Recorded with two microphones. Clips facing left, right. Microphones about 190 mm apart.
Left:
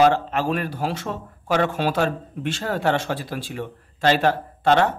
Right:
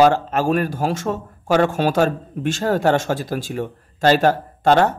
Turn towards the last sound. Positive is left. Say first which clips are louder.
# right 3 dB
turn(degrees=-45)  # may be behind; listen again after turning